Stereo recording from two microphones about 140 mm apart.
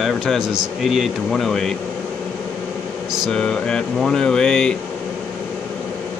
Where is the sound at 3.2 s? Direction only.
5° left (ahead or behind).